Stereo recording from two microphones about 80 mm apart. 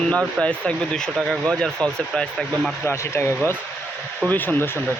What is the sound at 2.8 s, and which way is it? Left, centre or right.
Speech, left.